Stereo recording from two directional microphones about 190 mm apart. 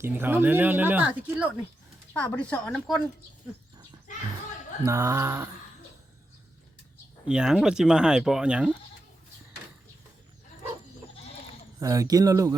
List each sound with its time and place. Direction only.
0.0 s speech: 10° right (ahead or behind)
2.1 s speech: 5° left (ahead or behind)
4.8 s speech: 15° right (ahead or behind)
7.3 s speech: 5° right (ahead or behind)
11.8 s speech: 15° right (ahead or behind)